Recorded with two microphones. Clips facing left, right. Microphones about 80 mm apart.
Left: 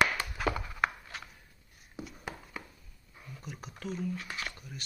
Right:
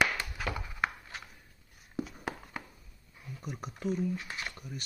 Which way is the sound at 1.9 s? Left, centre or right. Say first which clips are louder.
Right 5 dB; right.